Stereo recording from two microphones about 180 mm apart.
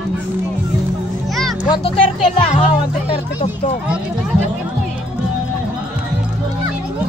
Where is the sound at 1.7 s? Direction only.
30° left (ahead or behind).